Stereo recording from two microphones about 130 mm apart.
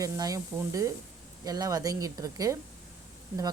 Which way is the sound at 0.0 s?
30° right (ahead or behind).